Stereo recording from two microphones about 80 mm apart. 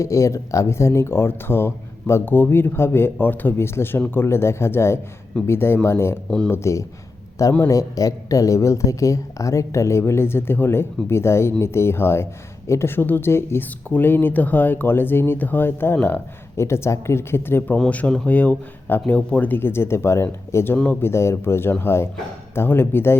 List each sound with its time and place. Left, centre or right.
0.0 s speech: left
17.7 s speech: centre
20.7 s speech: centre
21.0 s speech: left